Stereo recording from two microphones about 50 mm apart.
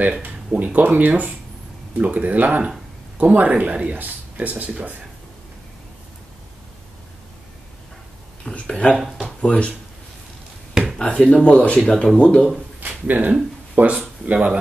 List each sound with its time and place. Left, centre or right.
0.0 s speech: right
3.9 s speech: right
8.5 s speech: left
11.0 s speech: left
11.7 s speech: centre
12.2 s speech: left
12.8 s a sound: right
13.8 s speech: right